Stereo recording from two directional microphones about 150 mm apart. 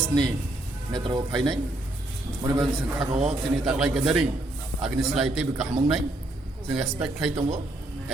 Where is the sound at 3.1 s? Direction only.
45° right (ahead or behind).